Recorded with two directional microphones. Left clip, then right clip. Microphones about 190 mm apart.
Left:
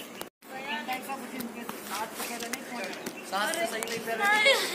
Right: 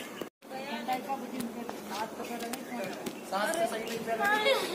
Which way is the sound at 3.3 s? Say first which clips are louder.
Left 1 dB; 55° right (ahead or behind).